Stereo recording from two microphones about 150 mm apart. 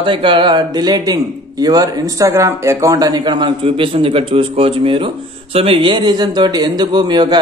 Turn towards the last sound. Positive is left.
turn(degrees=-30)  # may be behind; listen again after turning